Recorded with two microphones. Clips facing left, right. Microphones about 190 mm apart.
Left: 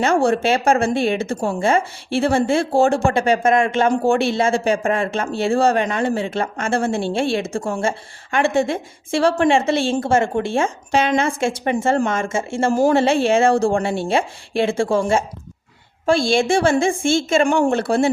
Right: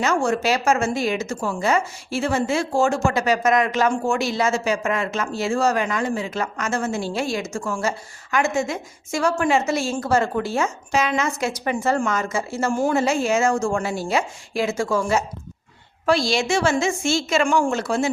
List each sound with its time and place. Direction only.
0.0 s speech: 30° left (ahead or behind)
16.1 s a woman's voice: 50° left (ahead or behind)